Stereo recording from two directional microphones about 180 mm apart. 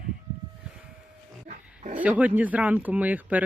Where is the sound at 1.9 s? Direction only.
10° right (ahead or behind).